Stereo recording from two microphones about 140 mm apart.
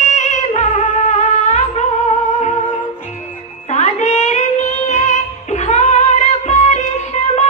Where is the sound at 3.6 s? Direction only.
55° left (ahead or behind).